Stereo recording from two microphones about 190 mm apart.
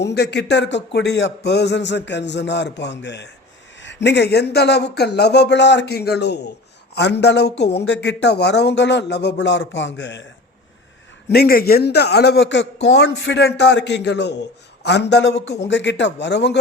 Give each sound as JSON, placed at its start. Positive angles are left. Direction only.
{"t": 0.0, "sound": "speech", "side_deg": 60}
{"t": 11.3, "sound": "speech", "side_deg": 55}